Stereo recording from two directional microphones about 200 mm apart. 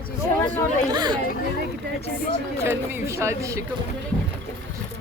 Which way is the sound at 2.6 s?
15° right (ahead or behind).